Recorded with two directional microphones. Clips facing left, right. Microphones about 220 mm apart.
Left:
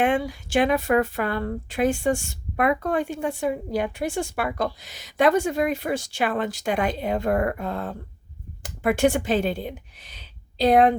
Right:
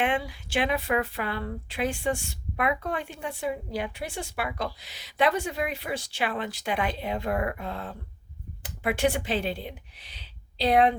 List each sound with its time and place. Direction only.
0.0 s a woman's voice: 45° left (ahead or behind)